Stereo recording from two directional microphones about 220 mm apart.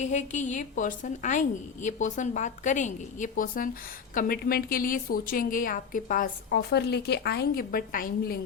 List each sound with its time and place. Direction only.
0.0 s a woman's voice: 35° left (ahead or behind)